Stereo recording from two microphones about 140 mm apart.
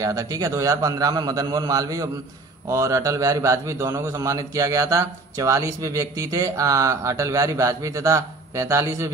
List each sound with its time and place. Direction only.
0.0 s a man's voice: 25° right (ahead or behind)